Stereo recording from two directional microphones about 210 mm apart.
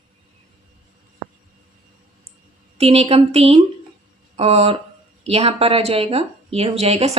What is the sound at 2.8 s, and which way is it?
A woman's voice, 30° right (ahead or behind).